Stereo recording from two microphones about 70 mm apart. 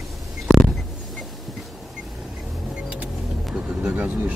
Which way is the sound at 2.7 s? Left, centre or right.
Centre.